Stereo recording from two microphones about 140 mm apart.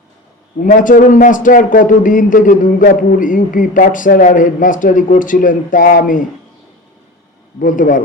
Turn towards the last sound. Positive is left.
turn(degrees=70)  # may be behind; listen again after turning